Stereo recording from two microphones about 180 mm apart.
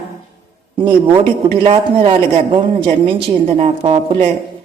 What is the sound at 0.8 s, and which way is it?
A woman's voice, 25° right (ahead or behind).